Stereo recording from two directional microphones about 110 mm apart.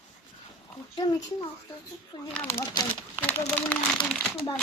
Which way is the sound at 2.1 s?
45° left (ahead or behind).